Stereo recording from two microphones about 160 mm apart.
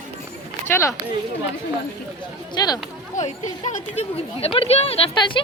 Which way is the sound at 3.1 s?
50° left (ahead or behind).